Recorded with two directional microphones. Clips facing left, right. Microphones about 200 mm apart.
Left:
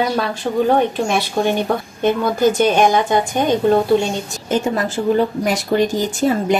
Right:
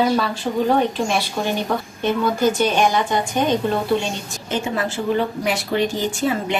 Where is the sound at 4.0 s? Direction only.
45° left (ahead or behind).